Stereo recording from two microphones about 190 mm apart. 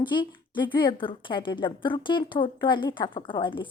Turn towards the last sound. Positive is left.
turn(degrees=25)  # may be behind; listen again after turning